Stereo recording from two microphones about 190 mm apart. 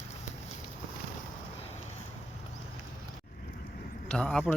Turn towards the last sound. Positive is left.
turn(degrees=5)  # may be behind; listen again after turning